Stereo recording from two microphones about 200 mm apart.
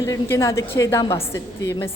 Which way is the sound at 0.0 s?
15° left (ahead or behind).